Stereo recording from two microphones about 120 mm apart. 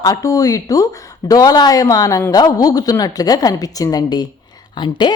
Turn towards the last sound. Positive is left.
turn(degrees=40)  # may be behind; listen again after turning